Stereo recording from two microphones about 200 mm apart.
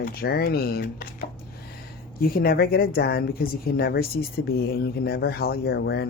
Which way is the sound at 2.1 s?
50° left (ahead or behind).